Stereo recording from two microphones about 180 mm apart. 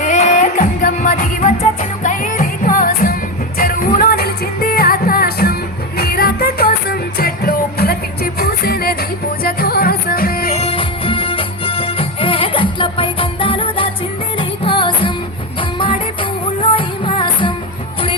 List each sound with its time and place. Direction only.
0.0 s music: 45° left (ahead or behind)
10.5 s music: 35° left (ahead or behind)
16.7 s music: 30° left (ahead or behind)